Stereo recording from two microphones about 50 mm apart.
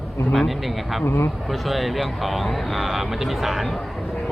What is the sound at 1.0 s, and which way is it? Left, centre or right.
Speech, left.